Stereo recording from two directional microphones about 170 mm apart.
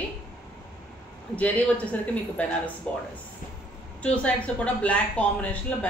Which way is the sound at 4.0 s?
5° left (ahead or behind).